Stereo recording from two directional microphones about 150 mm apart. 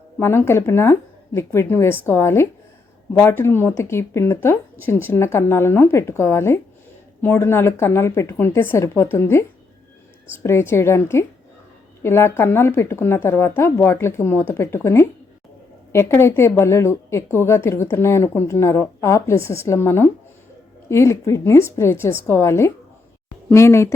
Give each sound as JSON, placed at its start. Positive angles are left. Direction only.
{"t": 0.2, "sound": "a woman's voice", "side_deg": 15}
{"t": 10.4, "sound": "a woman's voice", "side_deg": 15}